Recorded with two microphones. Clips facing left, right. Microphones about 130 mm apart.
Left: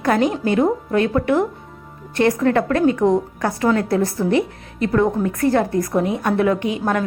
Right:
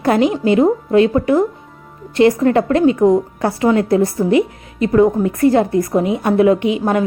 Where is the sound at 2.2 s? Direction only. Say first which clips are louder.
Right 4 dB; 15° right (ahead or behind).